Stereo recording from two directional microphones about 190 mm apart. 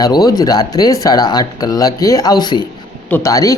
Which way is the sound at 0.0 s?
20° left (ahead or behind).